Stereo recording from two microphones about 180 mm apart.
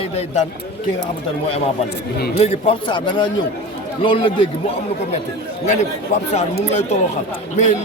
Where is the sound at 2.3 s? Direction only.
35° left (ahead or behind).